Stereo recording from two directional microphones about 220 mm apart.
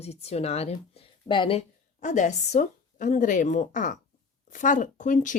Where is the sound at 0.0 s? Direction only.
30° left (ahead or behind).